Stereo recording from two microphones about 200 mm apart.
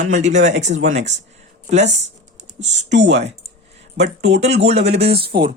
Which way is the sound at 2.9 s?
60° right (ahead or behind).